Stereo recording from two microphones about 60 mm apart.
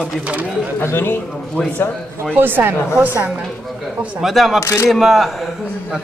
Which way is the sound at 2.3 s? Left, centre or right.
Right.